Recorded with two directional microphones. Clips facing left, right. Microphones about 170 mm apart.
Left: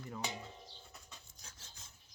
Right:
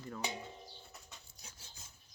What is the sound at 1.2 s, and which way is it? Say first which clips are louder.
Filing: right 1 dB; 10° right (ahead or behind).